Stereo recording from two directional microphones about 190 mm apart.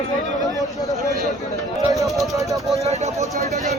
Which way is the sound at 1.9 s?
Centre (ahead or behind).